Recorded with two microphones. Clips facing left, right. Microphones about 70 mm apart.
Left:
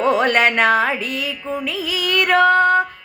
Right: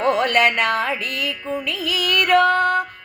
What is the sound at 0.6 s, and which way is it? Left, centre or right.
Music, left.